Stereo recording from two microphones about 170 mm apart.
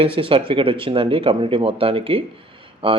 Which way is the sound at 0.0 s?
30° right (ahead or behind).